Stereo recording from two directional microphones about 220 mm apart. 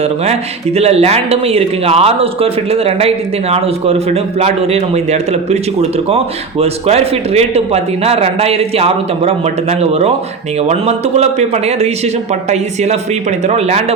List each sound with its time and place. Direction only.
0.0 s speech: 30° right (ahead or behind)